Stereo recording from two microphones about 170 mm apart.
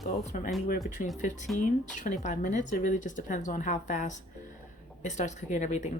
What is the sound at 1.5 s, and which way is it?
Speech, 45° left (ahead or behind).